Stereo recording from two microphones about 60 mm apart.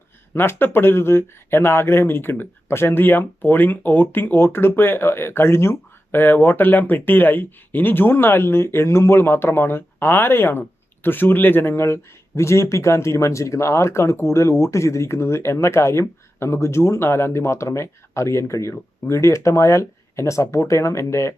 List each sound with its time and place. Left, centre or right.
0.3 s speech: left